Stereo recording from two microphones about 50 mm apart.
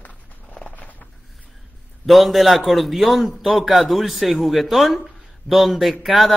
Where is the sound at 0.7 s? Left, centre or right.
Left.